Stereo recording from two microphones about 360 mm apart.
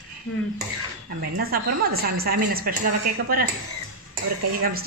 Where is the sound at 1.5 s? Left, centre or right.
Right.